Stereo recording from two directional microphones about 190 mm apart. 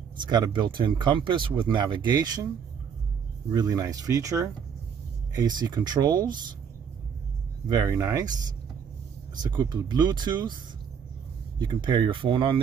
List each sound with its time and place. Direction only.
0.2 s speech: 25° right (ahead or behind)
3.6 s speech: 15° right (ahead or behind)
7.6 s speech: 20° right (ahead or behind)
9.3 s speech: 20° right (ahead or behind)